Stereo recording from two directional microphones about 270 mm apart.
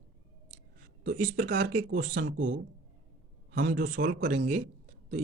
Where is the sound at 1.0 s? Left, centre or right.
Right.